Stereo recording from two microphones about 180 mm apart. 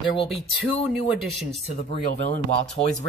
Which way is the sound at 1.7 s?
40° left (ahead or behind).